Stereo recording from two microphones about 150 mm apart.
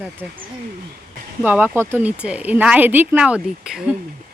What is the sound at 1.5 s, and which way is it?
Speech, 10° right (ahead or behind).